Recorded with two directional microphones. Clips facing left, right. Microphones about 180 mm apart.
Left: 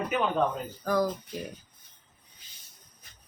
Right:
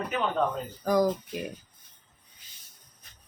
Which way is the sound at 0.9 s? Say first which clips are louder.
Right 3 dB; 15° right (ahead or behind).